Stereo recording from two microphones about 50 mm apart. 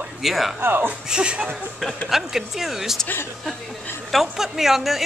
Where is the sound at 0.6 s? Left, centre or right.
Right.